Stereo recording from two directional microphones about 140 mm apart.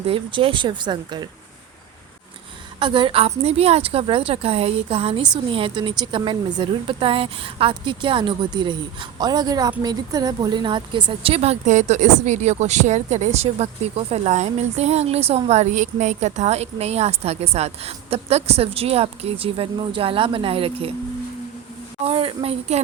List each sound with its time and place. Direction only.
0.0 s speech: 40° right (ahead or behind)
2.7 s a woman's voice: 35° right (ahead or behind)
22.0 s speech: 40° right (ahead or behind)